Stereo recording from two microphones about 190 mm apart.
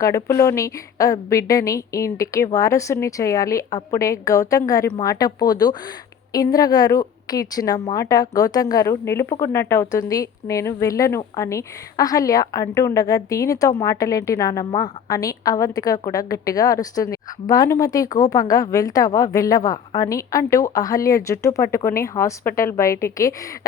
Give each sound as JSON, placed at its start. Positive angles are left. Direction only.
{"t": 0.0, "sound": "a woman's voice", "side_deg": 15}